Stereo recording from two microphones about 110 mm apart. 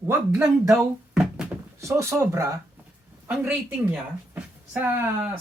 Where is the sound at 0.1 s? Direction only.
30° right (ahead or behind).